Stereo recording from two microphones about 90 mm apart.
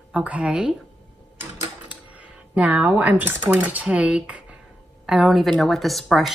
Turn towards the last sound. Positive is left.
turn(degrees=0)  # may be behind; listen again after turning